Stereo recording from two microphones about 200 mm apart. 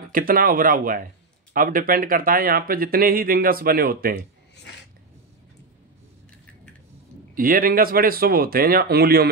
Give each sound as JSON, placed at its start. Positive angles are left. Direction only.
{"t": 0.1, "sound": "speech", "side_deg": -45}
{"t": 7.3, "sound": "speech", "side_deg": -45}